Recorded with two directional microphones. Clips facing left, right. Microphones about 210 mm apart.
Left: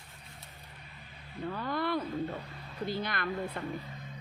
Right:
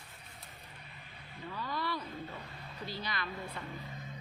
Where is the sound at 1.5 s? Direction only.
55° left (ahead or behind).